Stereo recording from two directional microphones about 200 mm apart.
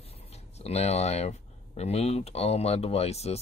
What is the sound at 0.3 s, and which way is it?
Speech, 30° left (ahead or behind).